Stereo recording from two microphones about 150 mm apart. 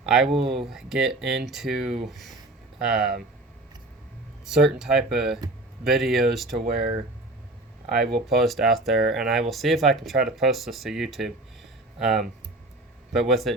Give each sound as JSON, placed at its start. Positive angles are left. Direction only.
{"t": 0.0, "sound": "speech", "side_deg": -5}
{"t": 4.4, "sound": "speech", "side_deg": -5}
{"t": 6.6, "sound": "speech", "side_deg": -90}
{"t": 8.3, "sound": "speech", "side_deg": 0}